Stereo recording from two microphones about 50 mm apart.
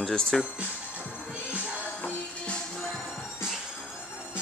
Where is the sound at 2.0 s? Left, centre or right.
Left.